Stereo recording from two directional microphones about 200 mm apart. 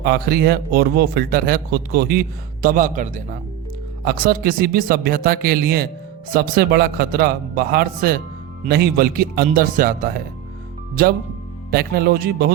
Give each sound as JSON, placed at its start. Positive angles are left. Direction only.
{"t": 0.0, "sound": "a man's voice", "side_deg": -50}
{"t": 11.7, "sound": "a man's voice", "side_deg": -50}